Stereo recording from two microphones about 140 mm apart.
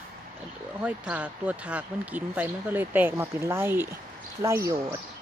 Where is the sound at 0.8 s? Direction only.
10° right (ahead or behind).